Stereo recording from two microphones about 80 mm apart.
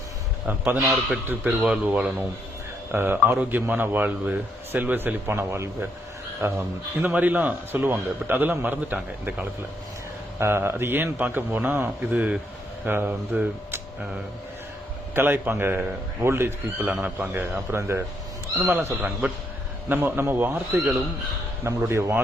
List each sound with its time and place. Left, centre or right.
0.4 s speech: right
10.4 s speech: right
15.1 s speech: right
16.8 s speech: centre
17.7 s speech: right